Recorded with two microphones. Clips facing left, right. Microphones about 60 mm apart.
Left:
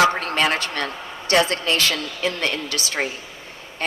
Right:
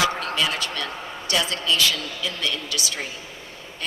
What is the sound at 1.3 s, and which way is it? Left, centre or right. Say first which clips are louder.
A woman's voice: left 5 dB; left.